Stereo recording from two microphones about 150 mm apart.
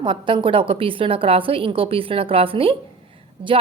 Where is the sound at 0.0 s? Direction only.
35° right (ahead or behind).